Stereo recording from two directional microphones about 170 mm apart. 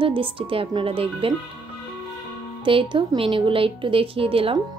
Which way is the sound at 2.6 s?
30° right (ahead or behind).